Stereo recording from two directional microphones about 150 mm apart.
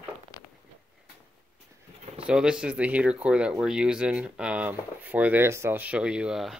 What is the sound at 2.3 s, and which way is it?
Speech, 5° right (ahead or behind).